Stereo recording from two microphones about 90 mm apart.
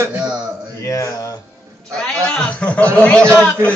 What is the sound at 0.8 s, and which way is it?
Speech, 35° left (ahead or behind).